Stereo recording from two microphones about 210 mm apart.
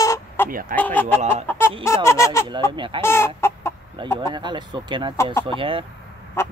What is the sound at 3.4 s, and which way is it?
Chicken, 10° left (ahead or behind).